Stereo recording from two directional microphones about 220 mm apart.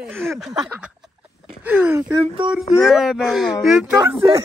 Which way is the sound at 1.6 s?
10° right (ahead or behind).